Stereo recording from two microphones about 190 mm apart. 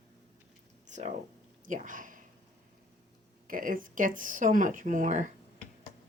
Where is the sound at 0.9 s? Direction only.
40° right (ahead or behind).